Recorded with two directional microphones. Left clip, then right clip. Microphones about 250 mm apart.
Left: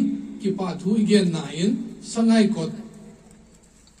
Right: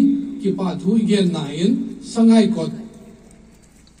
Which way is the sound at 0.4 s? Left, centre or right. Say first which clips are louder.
Right 4 dB; left.